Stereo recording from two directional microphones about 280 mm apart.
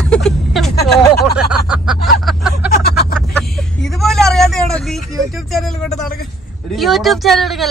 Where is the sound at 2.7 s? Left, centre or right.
Left.